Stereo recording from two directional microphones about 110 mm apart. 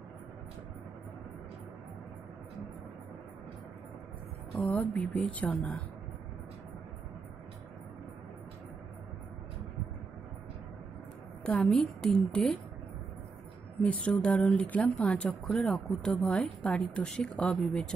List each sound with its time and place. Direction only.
4.6 s speech: 10° left (ahead or behind)
11.4 s speech: 10° left (ahead or behind)
13.8 s a woman's voice: 10° left (ahead or behind)